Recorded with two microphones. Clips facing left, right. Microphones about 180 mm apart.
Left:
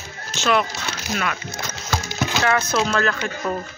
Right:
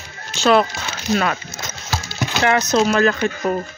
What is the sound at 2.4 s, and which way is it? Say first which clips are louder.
Speech: right 6 dB; 25° right (ahead or behind).